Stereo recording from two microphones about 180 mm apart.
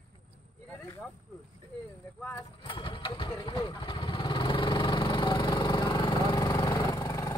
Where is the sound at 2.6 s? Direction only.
30° left (ahead or behind).